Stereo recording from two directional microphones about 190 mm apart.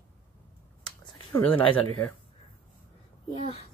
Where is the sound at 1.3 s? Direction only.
15° left (ahead or behind).